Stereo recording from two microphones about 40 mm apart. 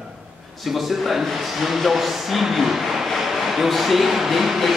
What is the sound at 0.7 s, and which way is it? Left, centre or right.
A man's voice, centre.